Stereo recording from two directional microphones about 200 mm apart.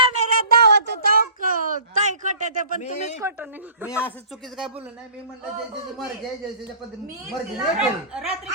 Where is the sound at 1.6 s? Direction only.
40° right (ahead or behind).